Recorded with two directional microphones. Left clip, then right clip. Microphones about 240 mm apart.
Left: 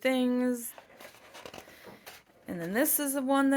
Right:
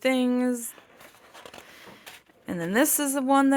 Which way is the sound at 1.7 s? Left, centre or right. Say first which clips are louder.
Right 3 dB; right.